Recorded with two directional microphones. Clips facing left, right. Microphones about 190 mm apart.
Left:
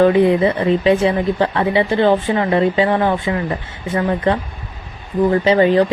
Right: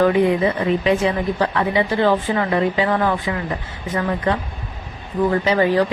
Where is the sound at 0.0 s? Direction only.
30° left (ahead or behind).